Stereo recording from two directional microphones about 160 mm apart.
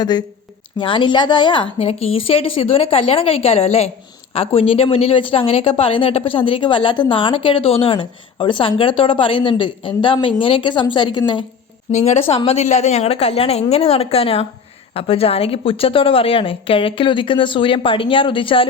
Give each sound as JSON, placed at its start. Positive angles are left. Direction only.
{"t": 0.0, "sound": "speech", "side_deg": 25}
{"t": 11.9, "sound": "a woman's voice", "side_deg": 45}